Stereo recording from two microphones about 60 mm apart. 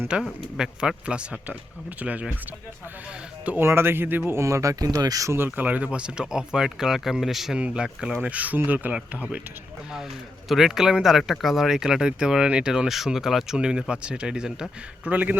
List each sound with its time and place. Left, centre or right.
0.1 s speech: centre
3.6 s speech: right
4.3 s speech: right
5.5 s speech: right
8.2 s speech: right
10.5 s speech: centre
15.0 s speech: right